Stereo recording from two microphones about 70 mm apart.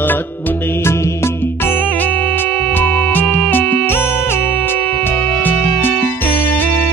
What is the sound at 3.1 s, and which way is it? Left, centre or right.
Music, left.